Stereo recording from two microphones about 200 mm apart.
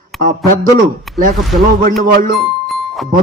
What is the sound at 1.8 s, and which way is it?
Speech, 45° right (ahead or behind).